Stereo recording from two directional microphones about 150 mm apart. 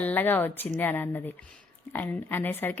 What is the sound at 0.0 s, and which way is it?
A woman's voice, 10° left (ahead or behind).